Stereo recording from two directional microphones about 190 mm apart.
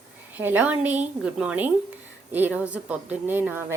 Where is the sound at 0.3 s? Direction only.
10° right (ahead or behind).